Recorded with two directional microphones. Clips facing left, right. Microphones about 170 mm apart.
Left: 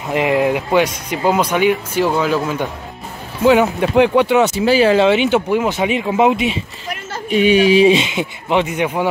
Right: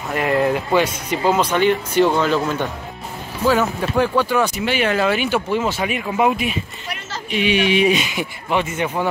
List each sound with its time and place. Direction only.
0.1 s speech: 15° left (ahead or behind)
3.4 s speech: 20° left (ahead or behind)
7.5 s speech: 35° left (ahead or behind); by 9.0 s 15° left (ahead or behind)